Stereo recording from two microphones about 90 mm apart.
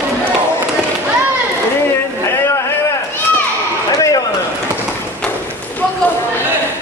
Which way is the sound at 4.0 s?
40° left (ahead or behind).